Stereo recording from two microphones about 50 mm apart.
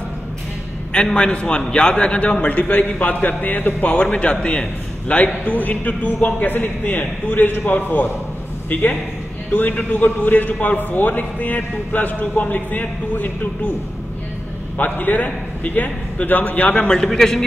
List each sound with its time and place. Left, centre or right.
1.1 s a man's voice: centre; by 4.0 s left
4.0 s a man's voice: left
9.5 s a man's voice: left
14.8 s a man's voice: left
16.8 s a man's voice: centre